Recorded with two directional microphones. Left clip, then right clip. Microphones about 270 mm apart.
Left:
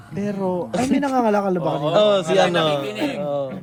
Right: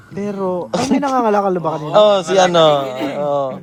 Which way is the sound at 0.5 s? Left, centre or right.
Right.